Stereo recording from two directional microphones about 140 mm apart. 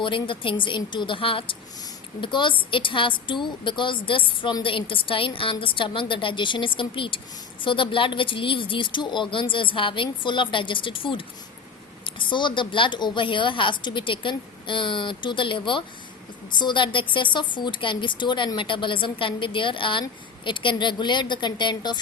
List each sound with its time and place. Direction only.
0.0 s a woman's voice: 35° left (ahead or behind)